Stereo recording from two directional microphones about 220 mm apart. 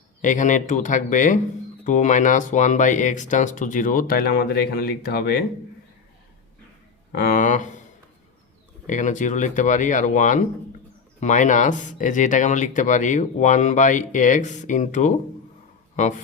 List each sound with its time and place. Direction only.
0.2 s speech: 35° left (ahead or behind)
7.1 s speech: 45° left (ahead or behind)
8.9 s speech: 35° left (ahead or behind)